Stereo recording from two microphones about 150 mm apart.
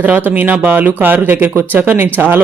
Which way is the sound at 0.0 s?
10° right (ahead or behind).